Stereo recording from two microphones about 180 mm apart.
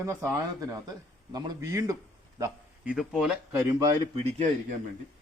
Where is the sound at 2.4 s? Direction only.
5° right (ahead or behind).